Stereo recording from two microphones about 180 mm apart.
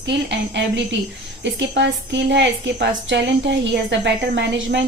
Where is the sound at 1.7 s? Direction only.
75° right (ahead or behind).